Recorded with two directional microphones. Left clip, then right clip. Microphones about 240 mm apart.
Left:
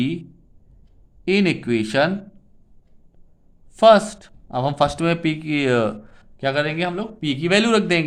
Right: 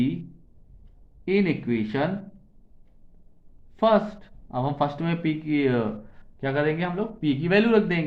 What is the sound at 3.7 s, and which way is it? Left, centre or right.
A man's voice, left.